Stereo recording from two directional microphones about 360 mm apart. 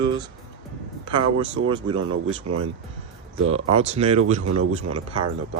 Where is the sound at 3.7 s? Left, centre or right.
Centre.